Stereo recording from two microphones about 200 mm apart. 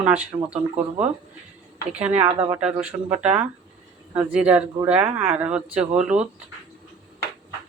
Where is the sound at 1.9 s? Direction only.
5° right (ahead or behind).